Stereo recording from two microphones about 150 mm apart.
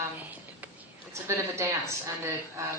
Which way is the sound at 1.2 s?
20° right (ahead or behind).